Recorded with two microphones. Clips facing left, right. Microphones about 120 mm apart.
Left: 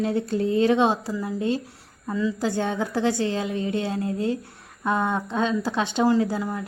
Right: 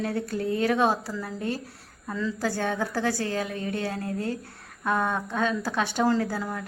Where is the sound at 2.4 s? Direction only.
20° left (ahead or behind).